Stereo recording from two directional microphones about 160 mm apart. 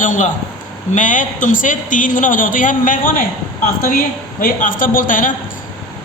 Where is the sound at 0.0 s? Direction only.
55° left (ahead or behind).